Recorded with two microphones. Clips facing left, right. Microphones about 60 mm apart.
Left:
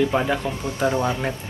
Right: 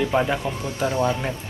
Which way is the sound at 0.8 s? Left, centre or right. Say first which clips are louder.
Left 1 dB; left.